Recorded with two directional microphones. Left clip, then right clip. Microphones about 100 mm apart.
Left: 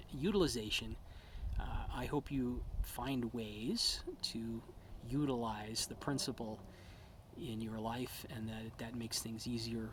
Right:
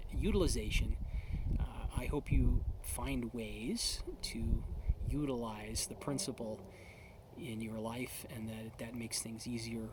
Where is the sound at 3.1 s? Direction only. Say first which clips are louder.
Right 1 dB; 45° right (ahead or behind).